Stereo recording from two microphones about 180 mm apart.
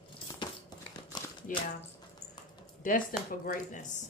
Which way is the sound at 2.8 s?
50° left (ahead or behind).